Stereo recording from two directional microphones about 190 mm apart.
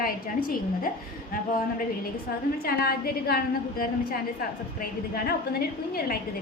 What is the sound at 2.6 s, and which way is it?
A woman's voice, 50° left (ahead or behind).